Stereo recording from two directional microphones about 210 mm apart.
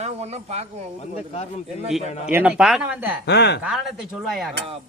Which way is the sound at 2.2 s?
5° right (ahead or behind).